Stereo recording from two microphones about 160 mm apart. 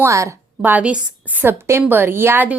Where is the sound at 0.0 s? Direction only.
20° right (ahead or behind).